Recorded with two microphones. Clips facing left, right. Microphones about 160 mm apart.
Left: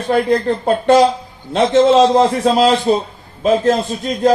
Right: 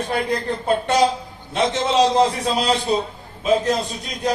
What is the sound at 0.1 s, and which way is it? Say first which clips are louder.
A man's voice: left 11 dB; 50° left (ahead or behind).